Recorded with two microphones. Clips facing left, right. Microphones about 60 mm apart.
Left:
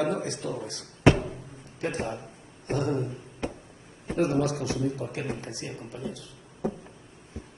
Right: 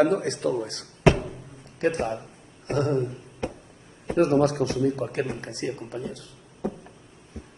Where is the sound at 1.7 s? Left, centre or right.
Right.